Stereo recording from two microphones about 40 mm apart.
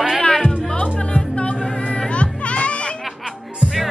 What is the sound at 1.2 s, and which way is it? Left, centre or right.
Music, left.